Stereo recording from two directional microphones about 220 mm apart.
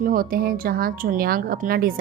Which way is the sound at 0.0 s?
40° right (ahead or behind).